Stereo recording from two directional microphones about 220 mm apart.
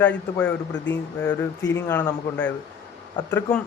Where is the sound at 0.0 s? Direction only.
5° left (ahead or behind).